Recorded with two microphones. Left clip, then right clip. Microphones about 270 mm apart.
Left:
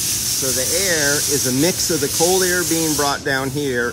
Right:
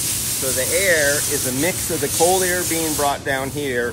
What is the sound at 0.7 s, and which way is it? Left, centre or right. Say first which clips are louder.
Speech: right 3 dB; centre.